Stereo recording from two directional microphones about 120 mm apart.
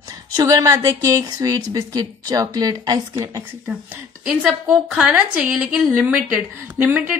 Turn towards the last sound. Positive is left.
turn(degrees=-15)  # may be behind; listen again after turning